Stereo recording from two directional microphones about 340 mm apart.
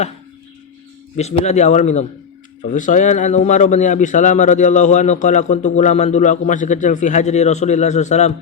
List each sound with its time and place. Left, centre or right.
1.1 s speech: centre